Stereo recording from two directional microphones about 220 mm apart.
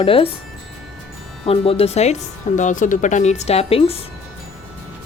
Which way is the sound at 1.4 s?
25° left (ahead or behind).